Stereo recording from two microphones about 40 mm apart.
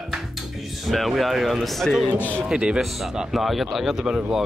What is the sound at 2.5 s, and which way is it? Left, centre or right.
Speech, right.